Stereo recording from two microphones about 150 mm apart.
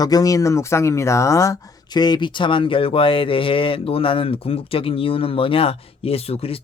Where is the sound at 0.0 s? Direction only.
25° left (ahead or behind).